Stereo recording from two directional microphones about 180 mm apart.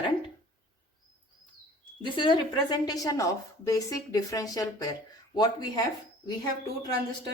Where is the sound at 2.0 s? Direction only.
25° left (ahead or behind).